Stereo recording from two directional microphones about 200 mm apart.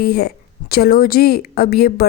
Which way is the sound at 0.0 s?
50° left (ahead or behind).